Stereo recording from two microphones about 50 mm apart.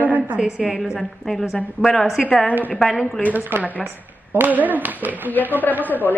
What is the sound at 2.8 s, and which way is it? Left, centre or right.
Speech, centre.